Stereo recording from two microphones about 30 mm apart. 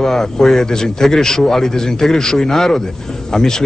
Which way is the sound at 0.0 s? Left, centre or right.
Centre.